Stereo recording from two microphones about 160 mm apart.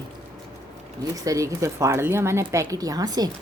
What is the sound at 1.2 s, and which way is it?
Speech, 20° right (ahead or behind).